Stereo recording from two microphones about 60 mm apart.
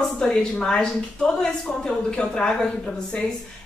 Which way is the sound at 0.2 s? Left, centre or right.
Centre.